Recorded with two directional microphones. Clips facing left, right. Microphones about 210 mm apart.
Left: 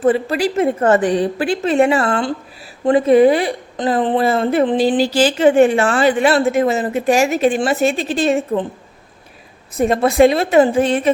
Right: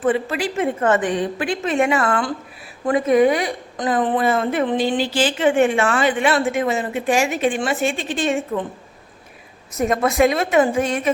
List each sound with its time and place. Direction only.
0.0 s a woman's voice: 40° left (ahead or behind)
9.7 s a woman's voice: 30° left (ahead or behind)